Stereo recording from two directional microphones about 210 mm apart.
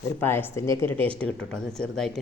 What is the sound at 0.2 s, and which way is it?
Speech, 10° left (ahead or behind).